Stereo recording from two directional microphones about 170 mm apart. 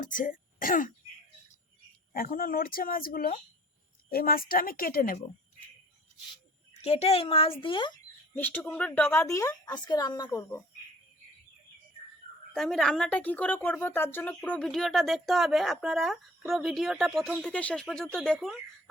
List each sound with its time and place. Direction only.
0.0 s speech: 50° left (ahead or behind)
2.1 s speech: 60° left (ahead or behind)
6.8 s a woman's voice: 35° left (ahead or behind)
8.4 s speech: 10° left (ahead or behind)
12.5 s a woman's voice: centre (ahead or behind)